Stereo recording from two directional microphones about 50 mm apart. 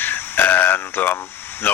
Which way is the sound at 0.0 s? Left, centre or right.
Left.